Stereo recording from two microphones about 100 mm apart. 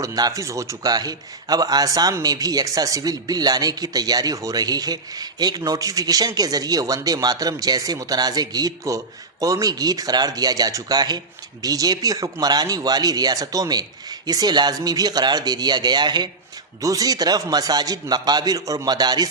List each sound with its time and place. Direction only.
0.0 s speech: 35° right (ahead or behind)
16.8 s speech: 35° right (ahead or behind)